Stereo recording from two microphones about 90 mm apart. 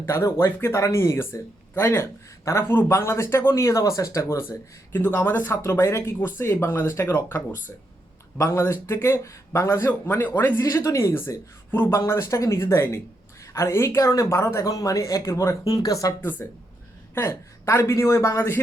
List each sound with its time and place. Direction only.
0.1 s speech: 30° left (ahead or behind)
10.6 s speech: 35° left (ahead or behind)
16.4 s speech: 30° left (ahead or behind)